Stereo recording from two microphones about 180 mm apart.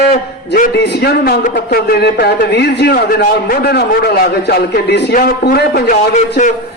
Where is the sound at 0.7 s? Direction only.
65° left (ahead or behind).